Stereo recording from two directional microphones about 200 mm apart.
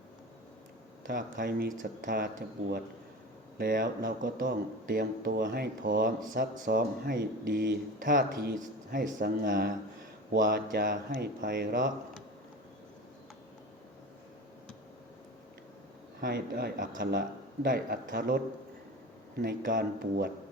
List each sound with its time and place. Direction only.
1.0 s speech: 45° right (ahead or behind)
16.2 s speech: 50° right (ahead or behind)